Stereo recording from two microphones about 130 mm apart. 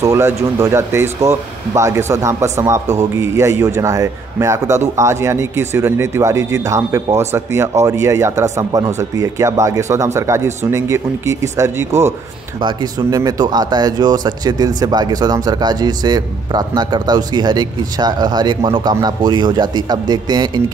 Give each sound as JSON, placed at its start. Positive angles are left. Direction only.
{"t": 0.0, "sound": "speech", "side_deg": -25}